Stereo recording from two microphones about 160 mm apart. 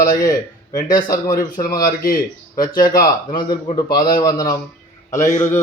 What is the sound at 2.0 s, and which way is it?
Speech, 65° left (ahead or behind).